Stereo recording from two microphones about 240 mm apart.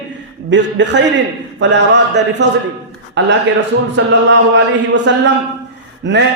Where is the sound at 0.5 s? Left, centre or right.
Right.